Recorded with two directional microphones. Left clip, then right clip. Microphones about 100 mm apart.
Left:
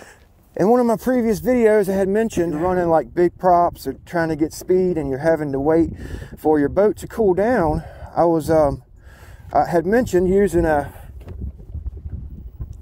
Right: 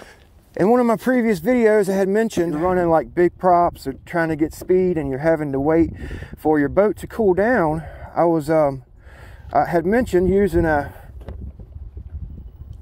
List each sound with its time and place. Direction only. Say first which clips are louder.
0.9 s a man's voice: even; 20° left (ahead or behind)